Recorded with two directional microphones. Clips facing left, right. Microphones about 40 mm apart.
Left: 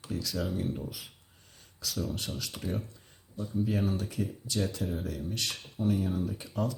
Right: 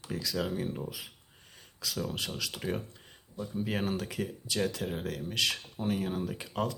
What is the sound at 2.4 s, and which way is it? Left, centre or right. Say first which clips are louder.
Speech: right 1 dB; right.